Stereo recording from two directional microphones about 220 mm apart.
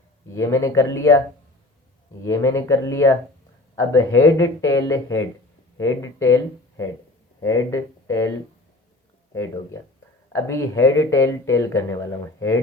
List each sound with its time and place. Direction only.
0.3 s speech: 15° left (ahead or behind)
2.2 s speech: 15° left (ahead or behind)
9.3 s speech: 15° left (ahead or behind)